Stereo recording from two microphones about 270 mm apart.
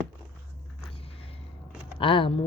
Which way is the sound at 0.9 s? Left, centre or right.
Left.